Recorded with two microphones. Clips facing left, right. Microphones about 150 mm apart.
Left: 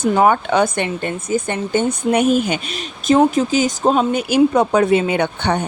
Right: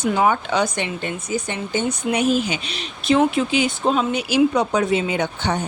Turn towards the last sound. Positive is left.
turn(degrees=60)  # may be behind; listen again after turning